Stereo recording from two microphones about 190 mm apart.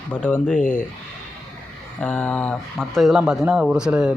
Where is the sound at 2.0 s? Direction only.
5° left (ahead or behind).